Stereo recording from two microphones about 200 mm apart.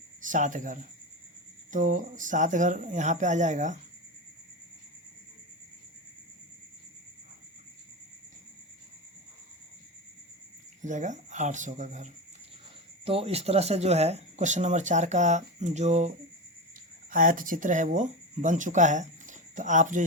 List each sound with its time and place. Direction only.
0.2 s speech: 40° right (ahead or behind)
10.8 s speech: 40° right (ahead or behind)